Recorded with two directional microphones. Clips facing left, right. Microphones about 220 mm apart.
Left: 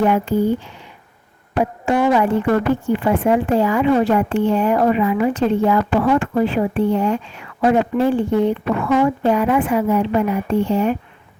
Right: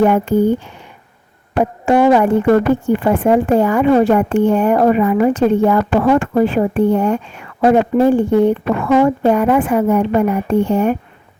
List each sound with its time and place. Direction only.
0.0 s a woman's voice: 50° right (ahead or behind)